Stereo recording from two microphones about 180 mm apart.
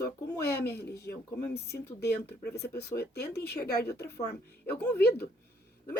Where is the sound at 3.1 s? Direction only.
65° left (ahead or behind).